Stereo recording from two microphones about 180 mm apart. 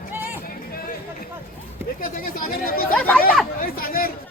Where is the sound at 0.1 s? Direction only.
10° right (ahead or behind).